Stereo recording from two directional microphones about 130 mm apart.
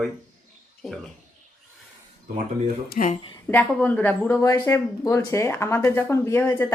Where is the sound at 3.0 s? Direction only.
90° left.